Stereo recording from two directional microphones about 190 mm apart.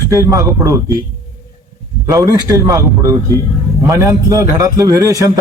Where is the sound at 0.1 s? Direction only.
15° right (ahead or behind).